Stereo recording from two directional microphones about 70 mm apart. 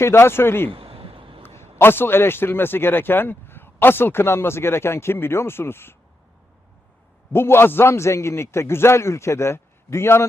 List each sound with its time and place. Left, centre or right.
0.0 s a man's voice: left
7.3 s a man's voice: left